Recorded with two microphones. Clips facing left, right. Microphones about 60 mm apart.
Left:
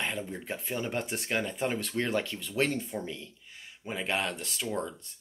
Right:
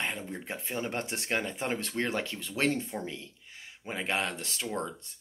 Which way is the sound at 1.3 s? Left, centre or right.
Right.